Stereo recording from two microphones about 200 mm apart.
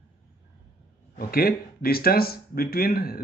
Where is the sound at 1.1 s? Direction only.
50° left (ahead or behind).